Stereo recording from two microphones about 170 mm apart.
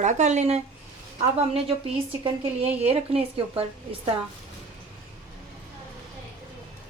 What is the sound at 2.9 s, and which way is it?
A woman's voice, 35° right (ahead or behind).